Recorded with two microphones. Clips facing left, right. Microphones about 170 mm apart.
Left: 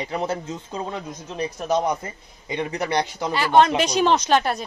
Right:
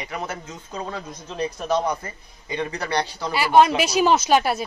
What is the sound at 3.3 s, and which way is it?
Speech, 10° right (ahead or behind).